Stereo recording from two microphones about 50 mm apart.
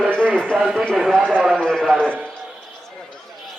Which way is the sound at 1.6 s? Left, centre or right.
Centre.